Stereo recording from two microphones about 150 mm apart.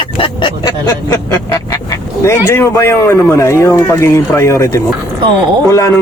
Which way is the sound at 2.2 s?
20° left (ahead or behind).